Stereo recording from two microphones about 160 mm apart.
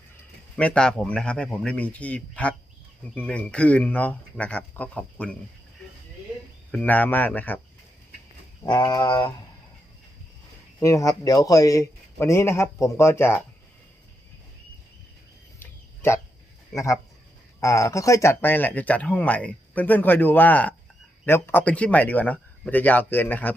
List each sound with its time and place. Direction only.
0.5 s speech: 5° left (ahead or behind)
6.7 s speech: 10° left (ahead or behind)
8.6 s a man's voice: 25° left (ahead or behind)
10.8 s a man's voice: 20° left (ahead or behind)
15.5 s a sound: 15° left (ahead or behind)
16.7 s a man's voice: 20° left (ahead or behind)